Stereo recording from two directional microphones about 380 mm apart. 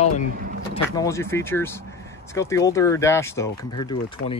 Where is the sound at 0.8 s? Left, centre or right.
Centre.